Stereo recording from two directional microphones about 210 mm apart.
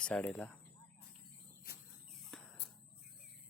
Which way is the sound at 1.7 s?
45° left (ahead or behind).